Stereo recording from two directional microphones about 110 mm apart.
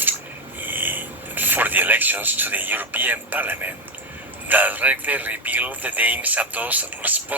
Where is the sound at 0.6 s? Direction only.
15° right (ahead or behind).